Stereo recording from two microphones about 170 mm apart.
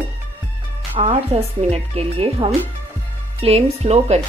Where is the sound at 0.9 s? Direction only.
35° right (ahead or behind).